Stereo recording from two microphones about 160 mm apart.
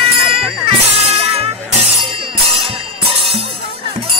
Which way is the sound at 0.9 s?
40° right (ahead or behind).